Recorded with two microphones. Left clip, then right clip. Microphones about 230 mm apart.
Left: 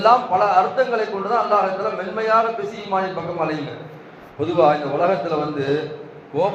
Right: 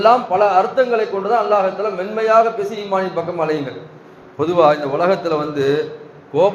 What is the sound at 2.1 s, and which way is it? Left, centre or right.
A man's voice, right.